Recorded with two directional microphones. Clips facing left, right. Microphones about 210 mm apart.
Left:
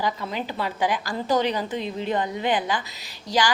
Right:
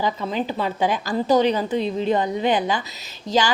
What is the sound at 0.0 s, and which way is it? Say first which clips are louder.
A woman's voice: right 4 dB; 20° right (ahead or behind).